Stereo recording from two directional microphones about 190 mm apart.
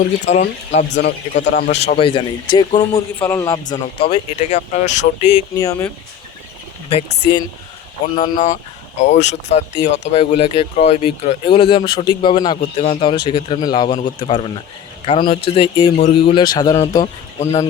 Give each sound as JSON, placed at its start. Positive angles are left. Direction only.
{"t": 0.3, "sound": "speech", "side_deg": 35}
{"t": 0.9, "sound": "a man's voice", "side_deg": 65}
{"t": 1.5, "sound": "a man's voice", "side_deg": 55}
{"t": 2.0, "sound": "speech", "side_deg": 25}
{"t": 2.9, "sound": "speech", "side_deg": 15}
{"t": 3.5, "sound": "speech", "side_deg": 25}
{"t": 5.5, "sound": "speech", "side_deg": 20}
{"t": 8.1, "sound": "speech", "side_deg": 40}
{"t": 17.4, "sound": "speech", "side_deg": 35}